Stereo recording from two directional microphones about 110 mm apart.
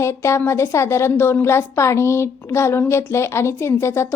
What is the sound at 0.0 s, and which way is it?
A woman's voice, 25° left (ahead or behind).